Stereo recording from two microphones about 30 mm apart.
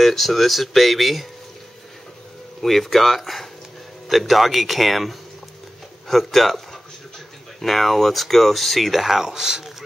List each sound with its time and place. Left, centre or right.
0.0 s speech: centre
2.6 s speech: centre
9.2 s speech: centre